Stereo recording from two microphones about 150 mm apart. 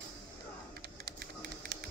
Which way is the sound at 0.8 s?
90° right.